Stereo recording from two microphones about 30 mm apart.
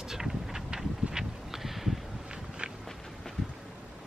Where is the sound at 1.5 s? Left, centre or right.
Centre.